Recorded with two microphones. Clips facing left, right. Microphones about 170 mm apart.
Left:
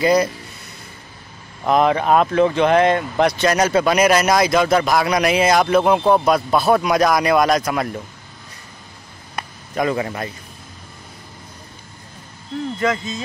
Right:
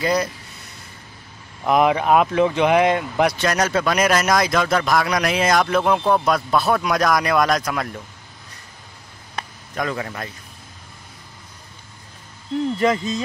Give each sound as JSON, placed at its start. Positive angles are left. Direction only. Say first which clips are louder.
{"t": 0.0, "sound": "speech", "louder": "left 5 dB", "side_deg": 5}
{"t": 1.7, "sound": "speech", "louder": "left 1 dB", "side_deg": -10}
{"t": 9.3, "sound": "a sound", "louder": "left 3 dB", "side_deg": 5}
{"t": 12.7, "sound": "speech", "louder": "even", "side_deg": -30}